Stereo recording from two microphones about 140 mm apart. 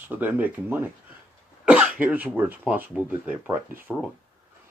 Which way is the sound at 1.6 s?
10° right (ahead or behind).